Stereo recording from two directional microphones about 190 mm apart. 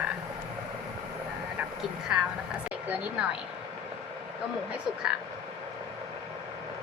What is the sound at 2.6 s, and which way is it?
Speech, 5° right (ahead or behind).